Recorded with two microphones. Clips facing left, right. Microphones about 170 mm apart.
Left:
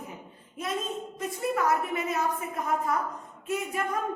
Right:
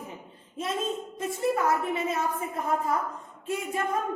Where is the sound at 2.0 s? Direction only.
25° right (ahead or behind).